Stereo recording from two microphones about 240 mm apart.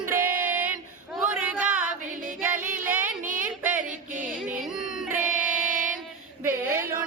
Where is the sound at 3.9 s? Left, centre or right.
Right.